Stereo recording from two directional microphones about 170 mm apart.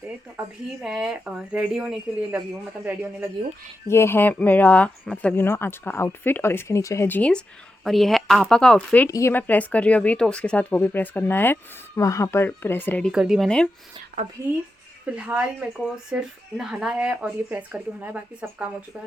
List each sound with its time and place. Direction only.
0.3 s speech: 5° right (ahead or behind)
3.8 s speech: 15° left (ahead or behind)
9.0 s speech: 15° left (ahead or behind)
13.1 s speech: 5° right (ahead or behind)
14.4 s speech: 15° right (ahead or behind)